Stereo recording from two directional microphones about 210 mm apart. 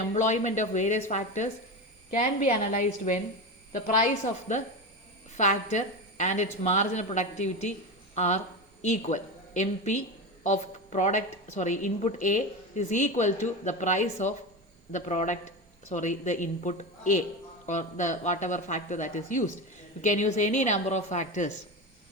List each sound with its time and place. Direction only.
0.1 s speech: 35° left (ahead or behind)